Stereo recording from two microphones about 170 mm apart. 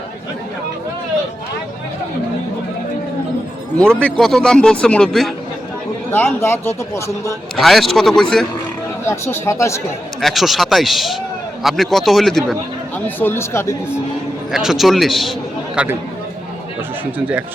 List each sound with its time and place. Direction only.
3.8 s a man's voice: 5° left (ahead or behind)
6.1 s speech: 15° left (ahead or behind)
7.5 s a man's voice: centre (ahead or behind)
9.0 s speech: 15° left (ahead or behind)
10.2 s a man's voice: centre (ahead or behind)
13.1 s speech: 10° left (ahead or behind)
14.5 s a man's voice: centre (ahead or behind)